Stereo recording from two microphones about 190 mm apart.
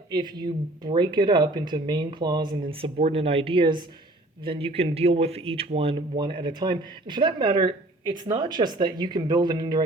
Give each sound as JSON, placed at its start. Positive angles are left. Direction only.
{"t": 0.1, "sound": "speech", "side_deg": -25}